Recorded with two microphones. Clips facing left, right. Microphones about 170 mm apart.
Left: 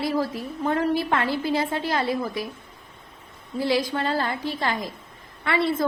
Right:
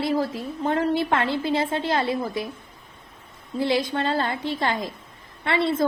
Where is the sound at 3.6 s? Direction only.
25° right (ahead or behind).